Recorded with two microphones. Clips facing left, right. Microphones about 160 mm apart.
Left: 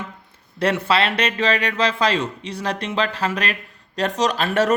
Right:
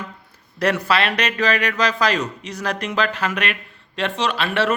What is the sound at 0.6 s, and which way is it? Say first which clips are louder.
Speech: even; 25° left (ahead or behind).